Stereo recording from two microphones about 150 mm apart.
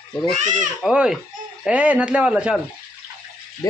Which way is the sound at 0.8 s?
5° right (ahead or behind).